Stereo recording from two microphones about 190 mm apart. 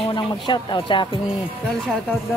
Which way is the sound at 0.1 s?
25° left (ahead or behind).